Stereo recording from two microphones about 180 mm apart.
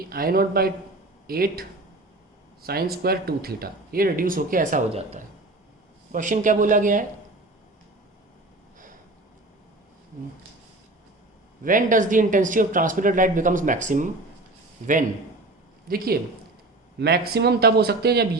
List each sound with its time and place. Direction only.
0.0 s a man's voice: 55° right (ahead or behind)
2.6 s speech: 55° right (ahead or behind)
11.6 s speech: 45° right (ahead or behind)
15.9 s a man's voice: 55° right (ahead or behind)